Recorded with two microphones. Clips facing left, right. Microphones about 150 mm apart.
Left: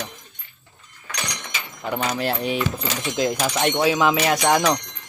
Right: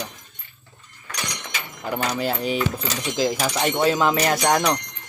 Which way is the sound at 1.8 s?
Centre (ahead or behind).